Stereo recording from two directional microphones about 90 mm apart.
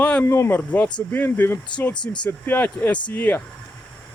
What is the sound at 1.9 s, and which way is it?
Speech, 55° left (ahead or behind).